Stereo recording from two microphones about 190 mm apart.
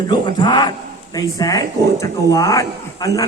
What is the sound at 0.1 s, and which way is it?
Speech, 20° left (ahead or behind).